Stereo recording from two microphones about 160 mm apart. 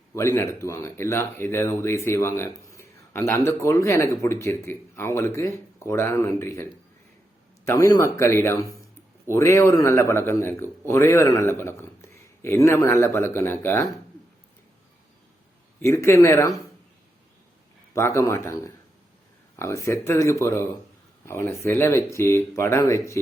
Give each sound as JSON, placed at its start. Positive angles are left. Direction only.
{"t": 0.1, "sound": "a man's voice", "side_deg": 15}
{"t": 15.8, "sound": "speech", "side_deg": 15}
{"t": 17.9, "sound": "speech", "side_deg": 15}